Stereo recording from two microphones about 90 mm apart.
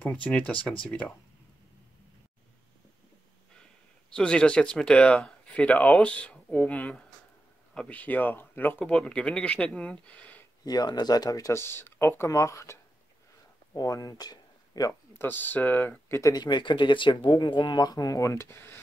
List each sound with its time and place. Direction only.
0.0 s speech: 15° left (ahead or behind)
4.1 s speech: 10° left (ahead or behind)
8.8 s speech: 10° left (ahead or behind)
10.6 s speech: 45° left (ahead or behind)
11.6 s speech: 25° left (ahead or behind)
12.3 s speech: 35° left (ahead or behind)
15.1 s speech: 20° left (ahead or behind)
16.1 s speech: 35° left (ahead or behind)
16.3 s speech: 60° left (ahead or behind); by 18.8 s 25° left (ahead or behind)